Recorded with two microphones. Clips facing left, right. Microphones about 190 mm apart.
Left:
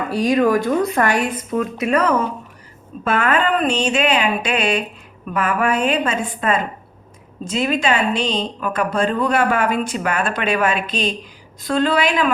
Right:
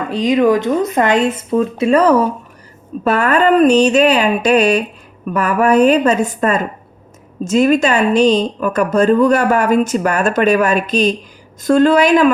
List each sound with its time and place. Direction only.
0.1 s a woman's voice: 20° right (ahead or behind); by 12.3 s 45° right (ahead or behind)